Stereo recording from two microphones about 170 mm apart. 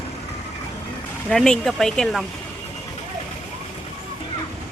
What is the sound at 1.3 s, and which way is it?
Speech, centre (ahead or behind).